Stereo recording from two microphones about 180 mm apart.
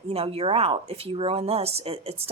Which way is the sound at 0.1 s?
35° right (ahead or behind).